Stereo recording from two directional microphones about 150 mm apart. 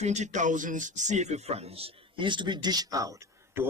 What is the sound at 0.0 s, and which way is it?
Speech, 50° right (ahead or behind).